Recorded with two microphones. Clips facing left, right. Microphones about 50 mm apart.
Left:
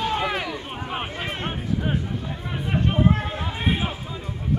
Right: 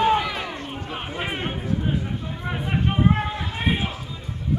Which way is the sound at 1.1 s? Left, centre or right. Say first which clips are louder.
Right 2 dB; centre.